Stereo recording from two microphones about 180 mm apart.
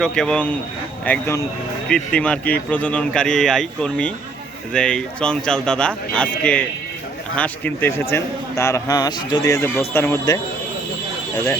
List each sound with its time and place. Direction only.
0.0 s a man's voice: 5° left (ahead or behind)